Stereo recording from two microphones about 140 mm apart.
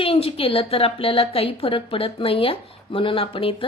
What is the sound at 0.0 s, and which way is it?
Speech, 40° left (ahead or behind).